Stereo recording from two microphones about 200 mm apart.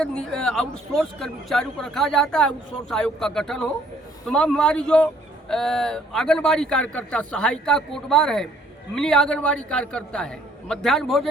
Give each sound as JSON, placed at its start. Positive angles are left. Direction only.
{"t": 0.0, "sound": "speech", "side_deg": 5}